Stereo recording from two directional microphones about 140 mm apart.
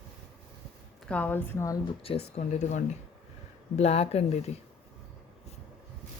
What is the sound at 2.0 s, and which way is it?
Speech, 40° left (ahead or behind).